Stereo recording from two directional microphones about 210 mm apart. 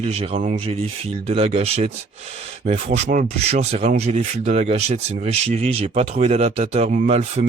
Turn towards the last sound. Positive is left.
turn(degrees=-30)  # may be behind; listen again after turning